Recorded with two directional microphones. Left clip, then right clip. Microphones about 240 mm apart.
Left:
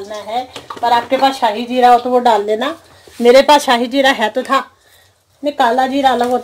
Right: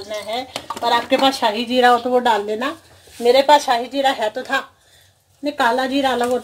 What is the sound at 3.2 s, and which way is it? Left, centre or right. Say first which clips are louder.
Speech: left 5 dB; left.